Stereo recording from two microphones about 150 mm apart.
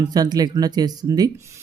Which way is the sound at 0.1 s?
25° right (ahead or behind).